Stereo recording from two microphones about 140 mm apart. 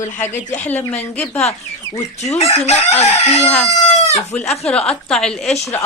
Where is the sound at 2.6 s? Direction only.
50° left (ahead or behind).